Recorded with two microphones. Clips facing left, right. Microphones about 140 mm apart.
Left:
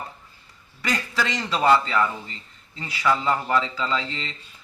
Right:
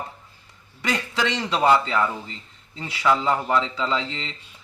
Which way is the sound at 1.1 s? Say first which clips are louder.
Right 3 dB; 20° right (ahead or behind).